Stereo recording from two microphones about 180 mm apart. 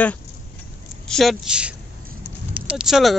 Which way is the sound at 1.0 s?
Centre (ahead or behind).